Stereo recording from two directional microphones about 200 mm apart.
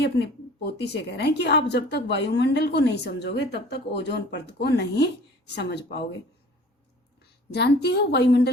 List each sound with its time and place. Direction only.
0.0 s a woman's voice: 55° left (ahead or behind)
7.5 s a woman's voice: 55° left (ahead or behind)